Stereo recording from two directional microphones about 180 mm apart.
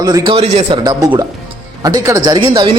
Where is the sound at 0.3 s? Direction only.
30° right (ahead or behind).